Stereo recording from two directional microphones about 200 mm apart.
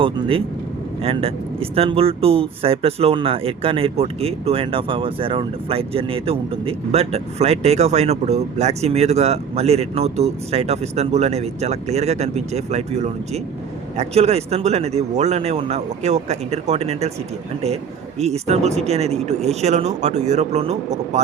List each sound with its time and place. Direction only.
0.0 s speech: 25° right (ahead or behind)
18.2 s speech: 35° right (ahead or behind)